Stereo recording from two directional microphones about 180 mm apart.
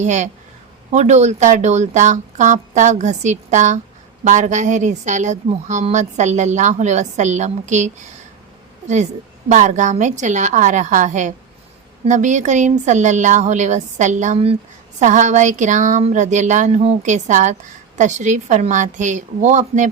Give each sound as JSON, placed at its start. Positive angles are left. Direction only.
{"t": 0.0, "sound": "a woman's voice", "side_deg": -40}
{"t": 9.5, "sound": "a woman's voice", "side_deg": -40}